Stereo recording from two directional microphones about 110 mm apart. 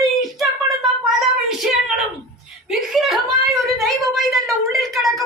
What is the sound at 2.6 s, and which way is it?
A woman's voice, 5° right (ahead or behind).